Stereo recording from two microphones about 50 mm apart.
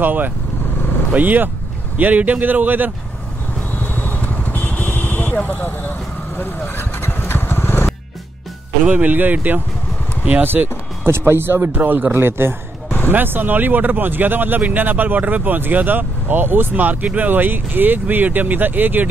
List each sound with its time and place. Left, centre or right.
0.0 s speech: right
3.7 s vehicle: left
8.8 s speech: right
10.4 s speech: right
12.2 s speech: right
13.1 s speech: right